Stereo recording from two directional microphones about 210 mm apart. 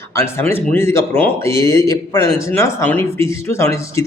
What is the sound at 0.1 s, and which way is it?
Speech, 15° left (ahead or behind).